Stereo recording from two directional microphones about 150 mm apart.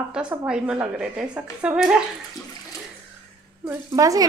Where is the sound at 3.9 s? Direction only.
25° right (ahead or behind).